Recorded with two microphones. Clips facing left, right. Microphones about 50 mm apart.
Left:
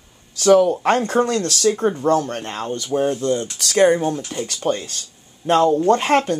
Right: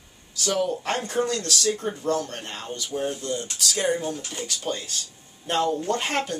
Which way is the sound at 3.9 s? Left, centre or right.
Left.